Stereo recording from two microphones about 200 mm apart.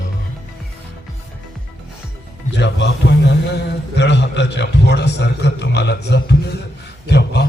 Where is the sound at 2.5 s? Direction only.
60° left (ahead or behind).